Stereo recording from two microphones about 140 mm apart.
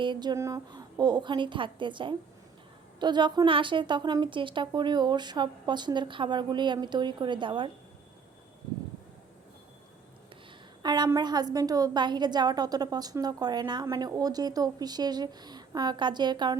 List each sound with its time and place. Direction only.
0.0 s a woman's voice: 35° right (ahead or behind)
0.3 s a woman's voice: 25° right (ahead or behind)
10.8 s a woman's voice: 30° right (ahead or behind)